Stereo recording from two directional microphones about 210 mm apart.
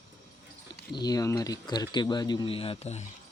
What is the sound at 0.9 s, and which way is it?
Speech, 20° left (ahead or behind).